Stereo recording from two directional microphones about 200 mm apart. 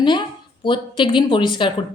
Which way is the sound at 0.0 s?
25° left (ahead or behind).